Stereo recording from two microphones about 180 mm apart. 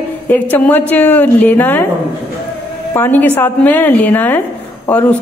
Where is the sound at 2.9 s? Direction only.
10° left (ahead or behind).